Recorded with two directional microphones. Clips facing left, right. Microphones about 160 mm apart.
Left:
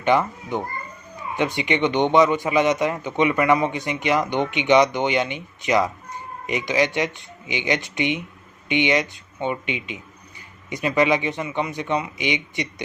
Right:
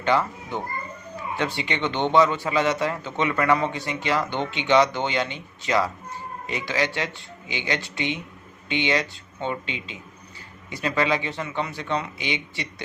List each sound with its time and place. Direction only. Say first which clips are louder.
0.0 s a child's voice: left 3 dB; 20° left (ahead or behind)